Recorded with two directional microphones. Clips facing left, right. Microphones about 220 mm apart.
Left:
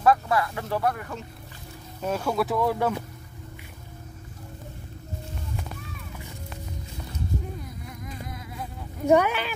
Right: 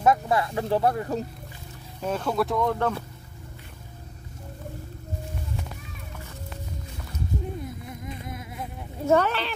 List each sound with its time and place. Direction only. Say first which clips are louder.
0.0 s speech: even; 20° right (ahead or behind)
2.0 s speech: even; 5° left (ahead or behind)
7.5 s insect: right 3 dB; 25° right (ahead or behind)
9.0 s speech: left 1 dB; 10° left (ahead or behind)